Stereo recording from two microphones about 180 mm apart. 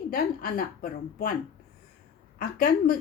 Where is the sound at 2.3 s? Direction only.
55° left (ahead or behind).